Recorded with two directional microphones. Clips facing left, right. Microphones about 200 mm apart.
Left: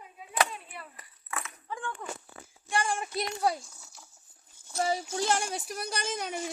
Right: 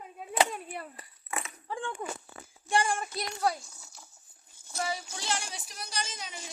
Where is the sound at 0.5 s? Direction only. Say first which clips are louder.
Right 5 dB; 45° right (ahead or behind).